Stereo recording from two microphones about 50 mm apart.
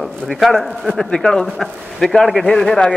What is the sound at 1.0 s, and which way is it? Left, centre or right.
A man's voice, centre.